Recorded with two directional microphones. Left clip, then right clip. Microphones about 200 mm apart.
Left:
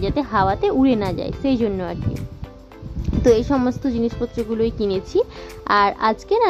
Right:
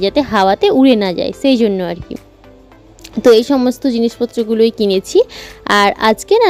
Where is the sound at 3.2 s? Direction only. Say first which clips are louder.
Right 7 dB; 35° right (ahead or behind).